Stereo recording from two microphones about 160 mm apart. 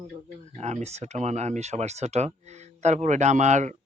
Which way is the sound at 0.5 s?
45° right (ahead or behind).